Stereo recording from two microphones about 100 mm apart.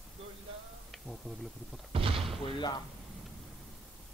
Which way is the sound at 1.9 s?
65° right (ahead or behind).